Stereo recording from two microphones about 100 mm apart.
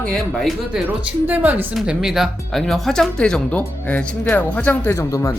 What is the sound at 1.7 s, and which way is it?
Speech, 5° right (ahead or behind).